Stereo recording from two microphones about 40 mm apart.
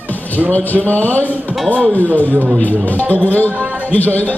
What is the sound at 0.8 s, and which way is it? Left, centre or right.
Speech, left.